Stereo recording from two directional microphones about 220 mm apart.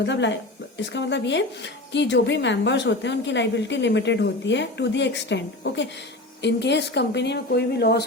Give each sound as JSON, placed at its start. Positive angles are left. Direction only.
{"t": 0.0, "sound": "speech", "side_deg": 55}